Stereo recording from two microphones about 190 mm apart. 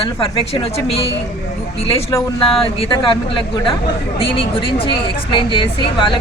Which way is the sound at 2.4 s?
25° left (ahead or behind).